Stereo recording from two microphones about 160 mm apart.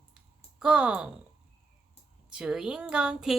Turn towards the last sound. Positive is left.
turn(degrees=-5)  # may be behind; listen again after turning